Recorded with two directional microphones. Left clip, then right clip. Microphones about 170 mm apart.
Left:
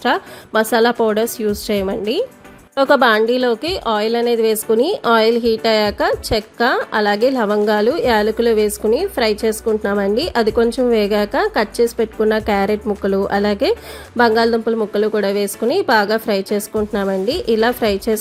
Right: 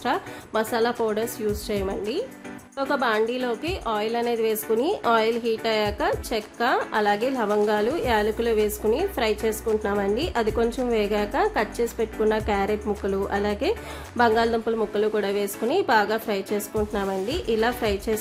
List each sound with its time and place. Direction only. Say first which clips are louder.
0.0 s a woman's voice: left 8 dB; 35° left (ahead or behind)